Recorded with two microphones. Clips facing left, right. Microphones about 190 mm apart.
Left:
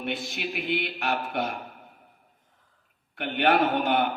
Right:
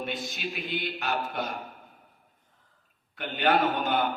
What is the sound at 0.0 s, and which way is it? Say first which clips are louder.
A man's voice: left 2 dB; 65° left (ahead or behind).